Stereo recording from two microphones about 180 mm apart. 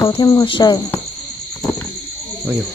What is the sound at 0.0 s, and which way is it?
Speech, 20° left (ahead or behind).